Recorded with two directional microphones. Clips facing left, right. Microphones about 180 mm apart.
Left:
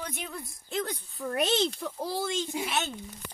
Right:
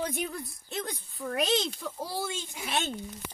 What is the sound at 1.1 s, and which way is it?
Speech, centre (ahead or behind).